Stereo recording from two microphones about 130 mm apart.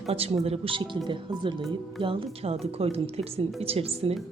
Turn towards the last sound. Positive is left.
turn(degrees=-50)  # may be behind; listen again after turning